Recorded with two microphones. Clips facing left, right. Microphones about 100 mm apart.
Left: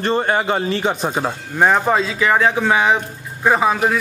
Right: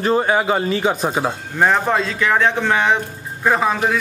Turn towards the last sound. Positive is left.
turn(degrees=5)  # may be behind; listen again after turning